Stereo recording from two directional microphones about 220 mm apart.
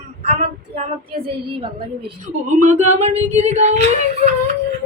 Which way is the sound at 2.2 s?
35° right (ahead or behind).